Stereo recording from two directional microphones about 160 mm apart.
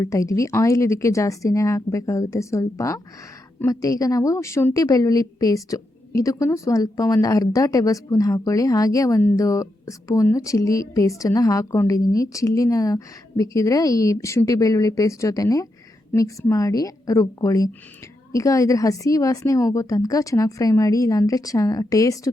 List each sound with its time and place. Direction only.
0.0 s a woman's voice: 20° left (ahead or behind)